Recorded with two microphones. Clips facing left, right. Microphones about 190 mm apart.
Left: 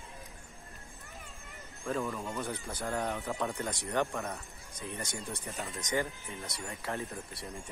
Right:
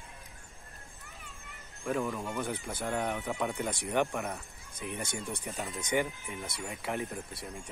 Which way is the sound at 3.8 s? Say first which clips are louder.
Right 2 dB; 15° right (ahead or behind).